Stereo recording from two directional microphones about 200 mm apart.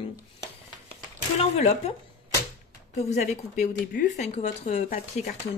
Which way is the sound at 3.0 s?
35° left (ahead or behind).